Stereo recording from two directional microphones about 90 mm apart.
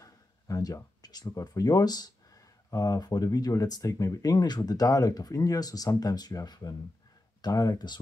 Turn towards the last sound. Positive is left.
turn(degrees=45)  # may be behind; listen again after turning